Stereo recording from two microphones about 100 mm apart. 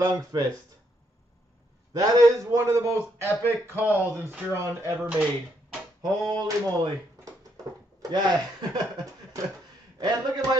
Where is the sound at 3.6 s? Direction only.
20° right (ahead or behind).